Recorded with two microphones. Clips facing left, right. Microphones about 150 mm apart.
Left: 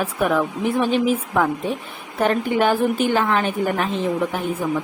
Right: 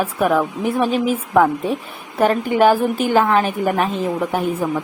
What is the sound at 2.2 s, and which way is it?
Speech, 5° right (ahead or behind).